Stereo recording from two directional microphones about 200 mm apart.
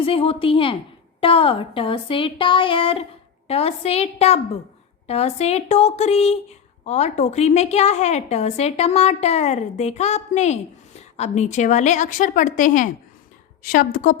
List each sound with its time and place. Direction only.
0.0 s a woman's voice: 30° left (ahead or behind)